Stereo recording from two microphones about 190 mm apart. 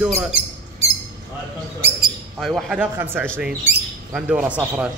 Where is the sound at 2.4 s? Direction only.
Centre (ahead or behind).